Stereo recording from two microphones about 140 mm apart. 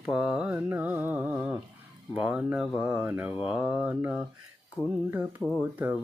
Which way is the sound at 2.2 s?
5° right (ahead or behind).